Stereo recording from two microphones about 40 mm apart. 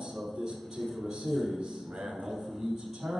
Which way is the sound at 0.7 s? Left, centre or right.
Centre.